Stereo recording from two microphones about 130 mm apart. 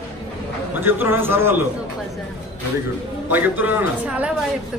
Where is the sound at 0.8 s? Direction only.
15° right (ahead or behind).